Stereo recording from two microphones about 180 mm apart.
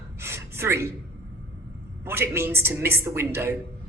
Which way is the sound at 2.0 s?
15° right (ahead or behind).